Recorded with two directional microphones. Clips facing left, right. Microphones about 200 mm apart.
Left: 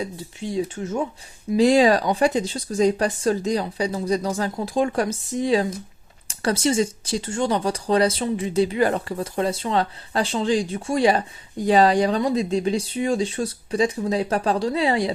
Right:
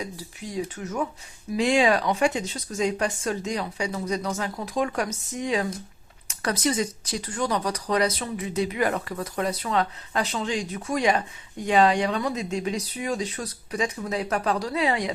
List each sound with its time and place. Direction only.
0.0 s speech: 25° left (ahead or behind)